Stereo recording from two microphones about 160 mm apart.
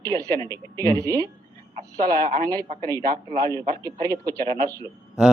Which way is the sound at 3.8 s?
25° right (ahead or behind).